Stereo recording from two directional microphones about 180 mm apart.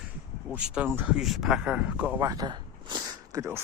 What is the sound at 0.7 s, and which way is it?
Speech, 10° right (ahead or behind).